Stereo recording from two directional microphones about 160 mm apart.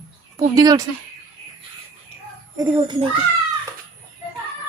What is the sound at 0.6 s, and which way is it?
Speech, 20° right (ahead or behind).